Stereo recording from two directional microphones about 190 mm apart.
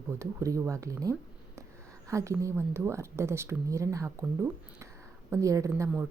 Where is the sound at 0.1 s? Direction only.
15° right (ahead or behind).